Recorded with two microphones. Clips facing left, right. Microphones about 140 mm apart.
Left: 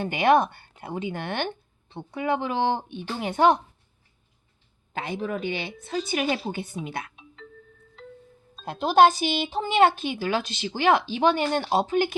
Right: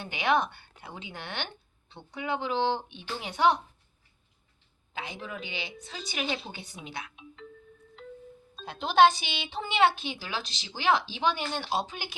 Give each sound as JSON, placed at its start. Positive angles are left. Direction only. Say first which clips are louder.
{"t": 0.0, "sound": "speech", "louder": "left 7 dB", "side_deg": 50}
{"t": 4.9, "sound": "speech", "louder": "left 9 dB", "side_deg": 55}
{"t": 8.6, "sound": "speech", "louder": "left 3 dB", "side_deg": 50}